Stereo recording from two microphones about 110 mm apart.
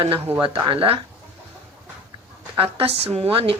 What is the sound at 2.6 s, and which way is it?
Speech, 60° right (ahead or behind).